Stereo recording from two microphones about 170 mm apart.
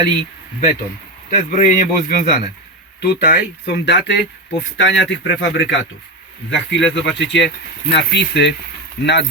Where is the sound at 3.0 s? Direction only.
65° left (ahead or behind).